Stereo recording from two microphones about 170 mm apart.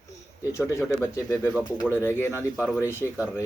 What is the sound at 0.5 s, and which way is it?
Speech, 15° left (ahead or behind).